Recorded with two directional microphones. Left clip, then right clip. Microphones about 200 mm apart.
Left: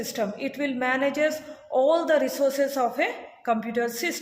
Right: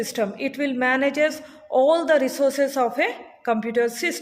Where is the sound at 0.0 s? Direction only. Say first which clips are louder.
Right 4 dB; 45° right (ahead or behind).